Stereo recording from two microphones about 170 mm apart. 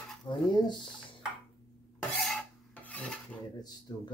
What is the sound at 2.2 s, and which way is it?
Filing, 5° left (ahead or behind).